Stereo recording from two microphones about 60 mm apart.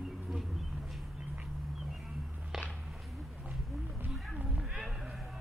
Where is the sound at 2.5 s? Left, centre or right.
Centre.